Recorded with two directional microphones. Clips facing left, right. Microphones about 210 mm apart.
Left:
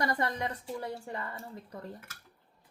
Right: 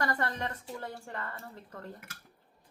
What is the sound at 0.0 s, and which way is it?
Speech, 15° left (ahead or behind).